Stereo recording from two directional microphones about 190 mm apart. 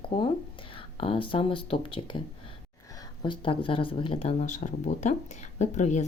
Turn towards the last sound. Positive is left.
turn(degrees=40)  # may be behind; listen again after turning